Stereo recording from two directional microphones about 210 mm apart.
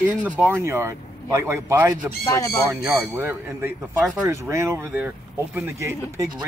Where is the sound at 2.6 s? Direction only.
10° right (ahead or behind).